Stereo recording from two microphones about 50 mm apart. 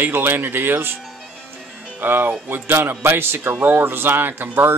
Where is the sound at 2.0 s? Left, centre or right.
Right.